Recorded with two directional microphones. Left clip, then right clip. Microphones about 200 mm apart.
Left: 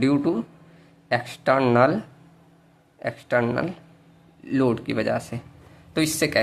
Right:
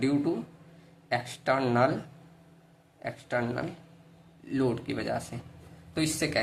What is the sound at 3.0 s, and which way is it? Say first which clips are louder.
Speech: left 8 dB; 25° left (ahead or behind).